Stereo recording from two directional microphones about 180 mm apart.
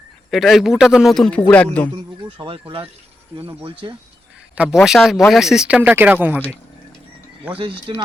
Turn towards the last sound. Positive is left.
turn(degrees=-30)  # may be behind; listen again after turning